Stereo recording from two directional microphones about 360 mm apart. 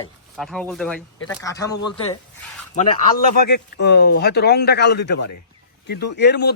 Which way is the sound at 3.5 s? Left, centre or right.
Left.